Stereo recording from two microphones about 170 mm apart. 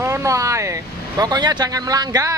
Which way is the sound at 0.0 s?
20° right (ahead or behind).